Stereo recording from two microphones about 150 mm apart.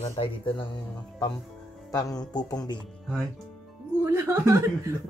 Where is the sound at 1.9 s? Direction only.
25° left (ahead or behind).